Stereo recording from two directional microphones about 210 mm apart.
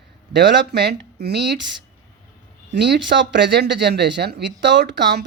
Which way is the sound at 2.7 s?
55° right (ahead or behind).